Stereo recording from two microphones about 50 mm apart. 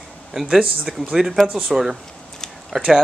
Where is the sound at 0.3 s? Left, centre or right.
Centre.